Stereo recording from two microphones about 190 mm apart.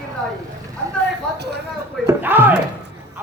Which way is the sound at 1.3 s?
60° right (ahead or behind).